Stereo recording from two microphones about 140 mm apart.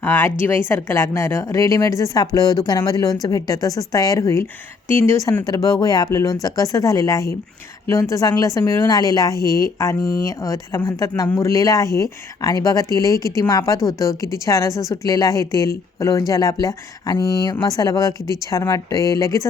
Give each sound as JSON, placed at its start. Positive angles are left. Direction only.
{"t": 0.0, "sound": "a woman's voice", "side_deg": 15}